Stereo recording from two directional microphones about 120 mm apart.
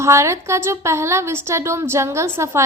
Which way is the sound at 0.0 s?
25° right (ahead or behind).